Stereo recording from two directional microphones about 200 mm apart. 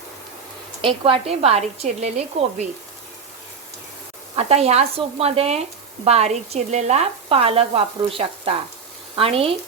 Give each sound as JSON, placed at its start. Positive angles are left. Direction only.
{"t": 0.8, "sound": "speech", "side_deg": -25}
{"t": 4.4, "sound": "speech", "side_deg": -30}